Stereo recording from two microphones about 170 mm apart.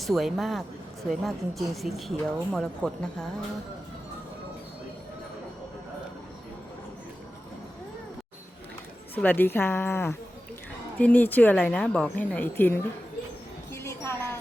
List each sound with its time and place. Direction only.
0.0 s a woman's voice: centre (ahead or behind)
9.1 s a woman's voice: 10° left (ahead or behind)
13.7 s music: 15° left (ahead or behind)